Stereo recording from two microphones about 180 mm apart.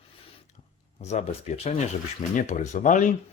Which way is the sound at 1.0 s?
40° left (ahead or behind).